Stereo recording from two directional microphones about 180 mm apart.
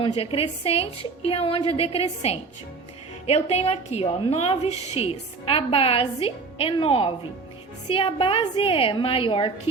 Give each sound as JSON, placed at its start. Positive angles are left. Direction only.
{"t": 0.0, "sound": "a woman's voice", "side_deg": 30}